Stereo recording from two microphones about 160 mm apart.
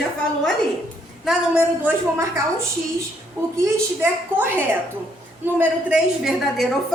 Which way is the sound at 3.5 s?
15° right (ahead or behind).